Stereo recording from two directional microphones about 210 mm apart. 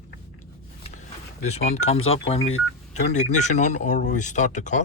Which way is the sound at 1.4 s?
30° left (ahead or behind).